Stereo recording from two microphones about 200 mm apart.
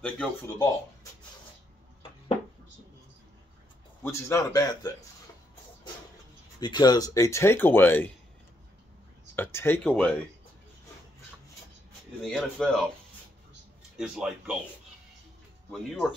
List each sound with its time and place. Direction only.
0.0 s speech: 10° left (ahead or behind)
4.0 s speech: 15° left (ahead or behind)
6.6 s speech: 20° left (ahead or behind)
9.3 s speech: 10° left (ahead or behind)
12.2 s speech: centre (ahead or behind)
13.9 s speech: 5° right (ahead or behind)
15.7 s speech: centre (ahead or behind)